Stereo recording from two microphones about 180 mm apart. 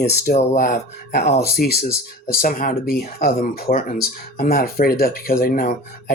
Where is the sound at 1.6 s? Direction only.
60° left (ahead or behind).